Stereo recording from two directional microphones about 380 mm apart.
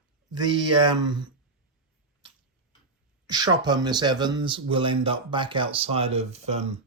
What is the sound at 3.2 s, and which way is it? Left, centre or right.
Speech, centre.